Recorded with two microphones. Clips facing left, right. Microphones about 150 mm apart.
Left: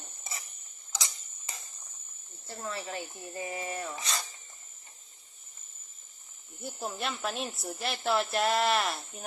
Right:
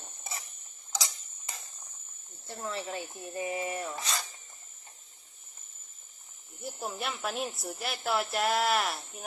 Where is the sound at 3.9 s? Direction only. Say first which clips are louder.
Right 1 dB; centre (ahead or behind).